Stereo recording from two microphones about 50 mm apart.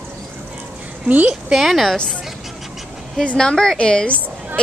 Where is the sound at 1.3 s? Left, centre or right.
Centre.